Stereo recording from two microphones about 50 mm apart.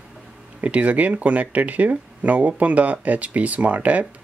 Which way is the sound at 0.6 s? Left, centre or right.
Right.